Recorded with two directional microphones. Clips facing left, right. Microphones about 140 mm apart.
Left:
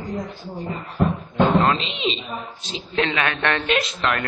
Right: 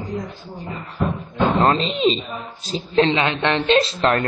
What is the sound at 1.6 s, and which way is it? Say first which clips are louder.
A woman's voice: right 4 dB; 40° right (ahead or behind).